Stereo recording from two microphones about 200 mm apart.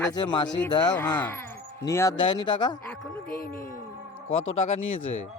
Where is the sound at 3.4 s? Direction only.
45° left (ahead or behind).